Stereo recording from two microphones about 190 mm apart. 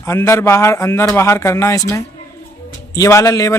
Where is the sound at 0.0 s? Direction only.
15° left (ahead or behind).